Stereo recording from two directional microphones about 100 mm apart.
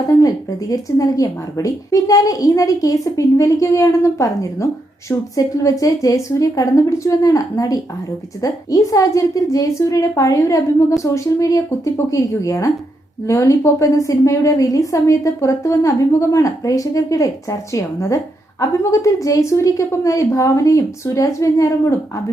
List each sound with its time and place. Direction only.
0.1 s speech: 35° left (ahead or behind)